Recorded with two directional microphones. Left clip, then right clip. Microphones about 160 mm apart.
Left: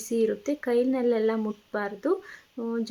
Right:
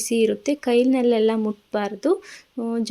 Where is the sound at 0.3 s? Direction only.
35° right (ahead or behind).